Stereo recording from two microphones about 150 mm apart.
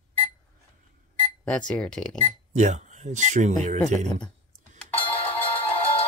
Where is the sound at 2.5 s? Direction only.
50° right (ahead or behind).